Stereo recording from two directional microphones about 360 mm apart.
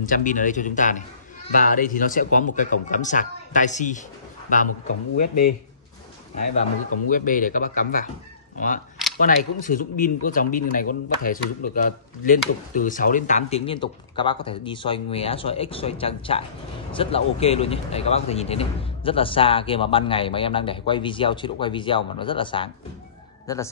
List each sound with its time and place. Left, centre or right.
0.0 s speech: left
5.2 s speech: left
7.1 s speech: left